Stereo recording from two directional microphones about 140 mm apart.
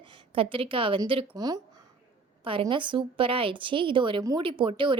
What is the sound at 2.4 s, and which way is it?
Speech, 40° right (ahead or behind).